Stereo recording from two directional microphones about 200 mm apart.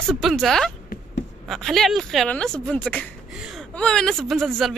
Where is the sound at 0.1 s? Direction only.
Centre (ahead or behind).